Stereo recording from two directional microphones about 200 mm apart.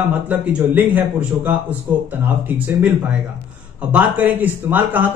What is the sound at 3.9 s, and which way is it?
Speech, 10° right (ahead or behind).